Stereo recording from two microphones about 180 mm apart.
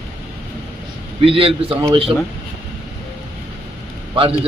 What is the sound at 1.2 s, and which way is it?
Speech, 30° right (ahead or behind).